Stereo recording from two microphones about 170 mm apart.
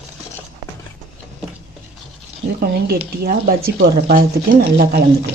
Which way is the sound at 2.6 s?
70° right (ahead or behind).